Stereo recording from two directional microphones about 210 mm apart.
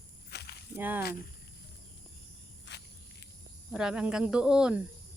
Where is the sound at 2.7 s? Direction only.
55° left (ahead or behind).